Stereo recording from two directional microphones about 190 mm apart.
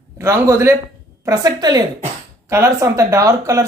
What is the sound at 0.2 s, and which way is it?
A woman's voice, 15° right (ahead or behind).